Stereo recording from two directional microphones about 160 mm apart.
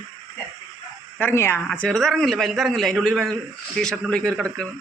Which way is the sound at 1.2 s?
15° left (ahead or behind).